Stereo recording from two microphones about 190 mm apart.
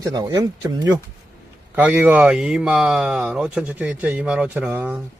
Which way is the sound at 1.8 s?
10° right (ahead or behind).